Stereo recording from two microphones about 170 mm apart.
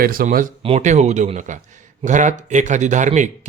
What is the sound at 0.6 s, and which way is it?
A man's voice, 40° right (ahead or behind).